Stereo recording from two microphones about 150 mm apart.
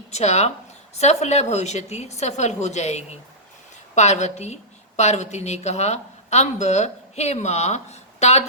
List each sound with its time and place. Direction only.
0.1 s a woman's voice: 45° left (ahead or behind)